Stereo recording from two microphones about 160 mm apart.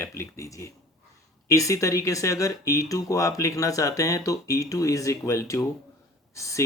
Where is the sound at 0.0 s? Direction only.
20° left (ahead or behind).